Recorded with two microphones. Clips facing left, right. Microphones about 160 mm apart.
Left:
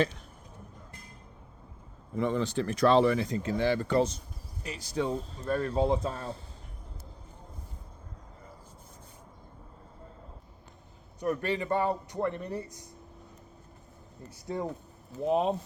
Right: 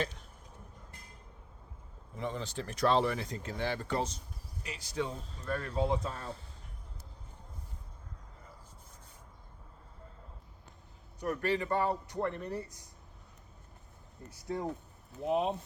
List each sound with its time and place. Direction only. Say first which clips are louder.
2.1 s speech: left 9 dB; 65° left (ahead or behind)
4.6 s speech: left 5 dB; 40° left (ahead or behind)
11.2 s a man's voice: left 2 dB; 20° left (ahead or behind)
15.2 s speech: left 4 dB; 35° left (ahead or behind)